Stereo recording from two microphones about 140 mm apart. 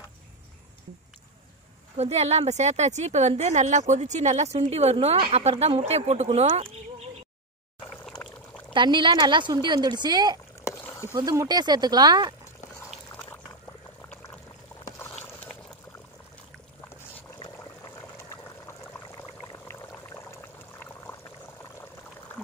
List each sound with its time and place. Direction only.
2.0 s a woman's voice: 50° right (ahead or behind)
8.7 s speech: 35° right (ahead or behind)
13.1 s dog: 15° left (ahead or behind)
19.4 s a sound: 25° left (ahead or behind)